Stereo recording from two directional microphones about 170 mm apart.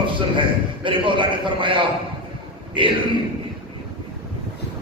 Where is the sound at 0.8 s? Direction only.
30° right (ahead or behind).